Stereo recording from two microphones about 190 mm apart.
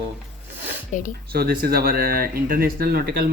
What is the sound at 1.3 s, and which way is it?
Speech, 55° right (ahead or behind).